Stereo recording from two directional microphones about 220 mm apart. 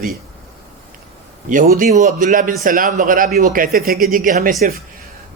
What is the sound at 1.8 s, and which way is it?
Speech, 35° right (ahead or behind).